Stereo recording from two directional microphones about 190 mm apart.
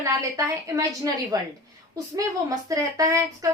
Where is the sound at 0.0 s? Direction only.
15° right (ahead or behind).